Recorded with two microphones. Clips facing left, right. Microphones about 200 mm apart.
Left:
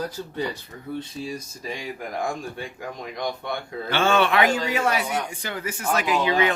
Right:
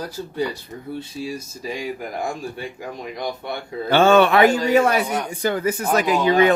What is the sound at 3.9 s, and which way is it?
Speech, 40° right (ahead or behind).